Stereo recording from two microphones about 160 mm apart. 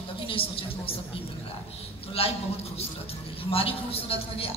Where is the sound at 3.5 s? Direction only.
35° left (ahead or behind).